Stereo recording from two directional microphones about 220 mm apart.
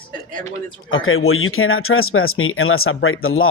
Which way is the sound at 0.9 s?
65° left (ahead or behind).